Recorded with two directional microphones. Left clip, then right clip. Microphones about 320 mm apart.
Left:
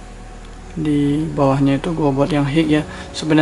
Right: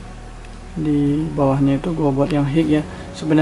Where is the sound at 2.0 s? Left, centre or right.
Right.